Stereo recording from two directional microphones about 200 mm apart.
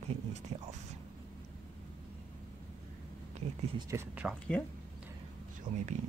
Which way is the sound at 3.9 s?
10° right (ahead or behind).